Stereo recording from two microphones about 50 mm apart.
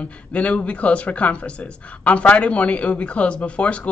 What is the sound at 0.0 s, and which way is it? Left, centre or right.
Speech, left.